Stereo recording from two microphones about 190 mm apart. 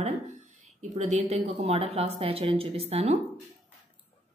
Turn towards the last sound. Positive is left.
turn(degrees=-35)  # may be behind; listen again after turning